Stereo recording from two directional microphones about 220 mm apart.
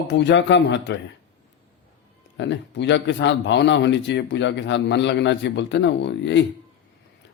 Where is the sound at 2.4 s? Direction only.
55° left (ahead or behind).